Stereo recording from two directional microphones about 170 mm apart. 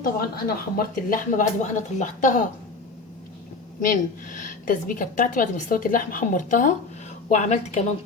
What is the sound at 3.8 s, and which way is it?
A woman's voice, 50° left (ahead or behind).